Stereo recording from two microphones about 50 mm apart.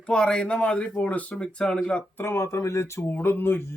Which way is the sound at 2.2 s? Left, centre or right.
Left.